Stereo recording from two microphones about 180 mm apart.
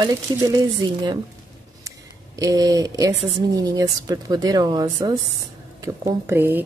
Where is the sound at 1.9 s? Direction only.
20° right (ahead or behind).